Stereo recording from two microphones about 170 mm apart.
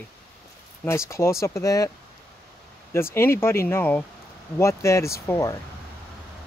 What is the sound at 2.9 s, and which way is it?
Speech, 15° left (ahead or behind).